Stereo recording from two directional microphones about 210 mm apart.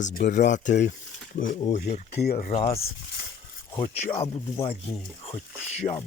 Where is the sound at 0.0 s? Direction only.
40° left (ahead or behind).